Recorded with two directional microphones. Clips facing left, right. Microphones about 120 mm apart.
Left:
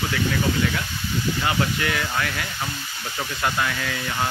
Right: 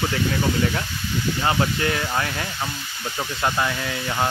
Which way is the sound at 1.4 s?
30° right (ahead or behind).